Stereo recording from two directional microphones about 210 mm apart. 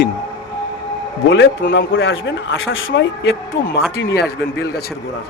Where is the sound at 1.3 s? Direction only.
60° left (ahead or behind).